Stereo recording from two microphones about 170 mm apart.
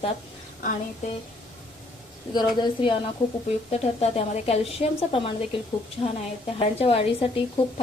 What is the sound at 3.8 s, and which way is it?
A woman's voice, 40° left (ahead or behind).